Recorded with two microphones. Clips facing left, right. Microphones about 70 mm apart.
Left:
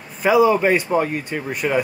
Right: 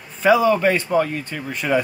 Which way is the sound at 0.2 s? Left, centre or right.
Centre.